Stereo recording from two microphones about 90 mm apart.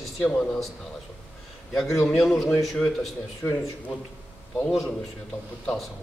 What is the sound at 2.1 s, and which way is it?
A man's voice, centre (ahead or behind).